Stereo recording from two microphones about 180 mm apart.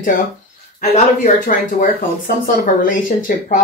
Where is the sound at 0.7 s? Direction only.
40° left (ahead or behind).